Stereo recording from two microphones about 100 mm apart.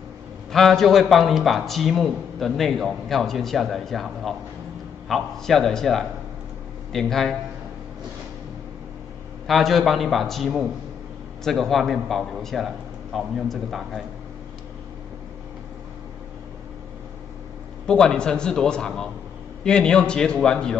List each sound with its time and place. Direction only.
0.5 s speech: 5° left (ahead or behind)
9.5 s speech: centre (ahead or behind)
17.8 s a man's voice: 5° left (ahead or behind)